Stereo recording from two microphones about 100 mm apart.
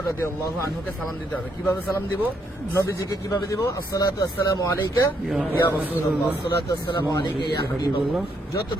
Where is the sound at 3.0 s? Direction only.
45° left (ahead or behind).